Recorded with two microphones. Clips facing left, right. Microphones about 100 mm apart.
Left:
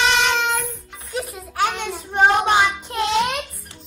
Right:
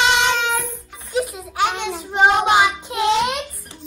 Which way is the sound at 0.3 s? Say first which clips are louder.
Right 1 dB; centre (ahead or behind).